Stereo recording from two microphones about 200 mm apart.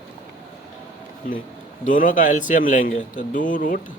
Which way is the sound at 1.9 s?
40° left (ahead or behind).